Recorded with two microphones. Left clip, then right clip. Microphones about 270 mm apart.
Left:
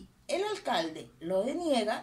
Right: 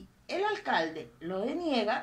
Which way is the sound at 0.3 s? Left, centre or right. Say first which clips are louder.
Right 1 dB; left.